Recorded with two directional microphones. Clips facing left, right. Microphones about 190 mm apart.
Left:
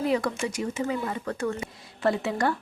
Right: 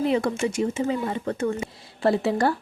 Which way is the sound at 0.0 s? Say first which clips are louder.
Right 3 dB; 25° right (ahead or behind).